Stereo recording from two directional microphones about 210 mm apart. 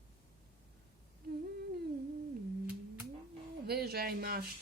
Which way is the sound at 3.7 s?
50° right (ahead or behind).